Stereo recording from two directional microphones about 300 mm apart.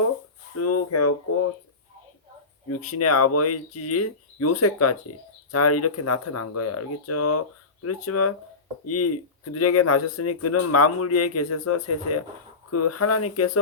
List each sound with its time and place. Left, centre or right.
0.5 s speech: left
2.6 s speech: left